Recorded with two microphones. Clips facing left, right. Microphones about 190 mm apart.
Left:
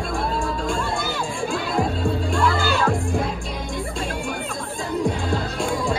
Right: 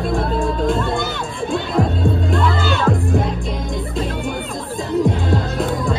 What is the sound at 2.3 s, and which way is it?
Music, centre (ahead or behind).